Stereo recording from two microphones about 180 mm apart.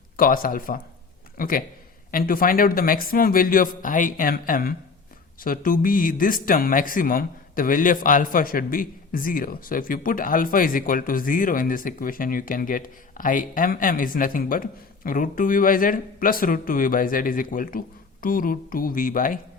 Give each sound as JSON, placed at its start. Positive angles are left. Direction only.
{"t": 0.2, "sound": "speech", "side_deg": 50}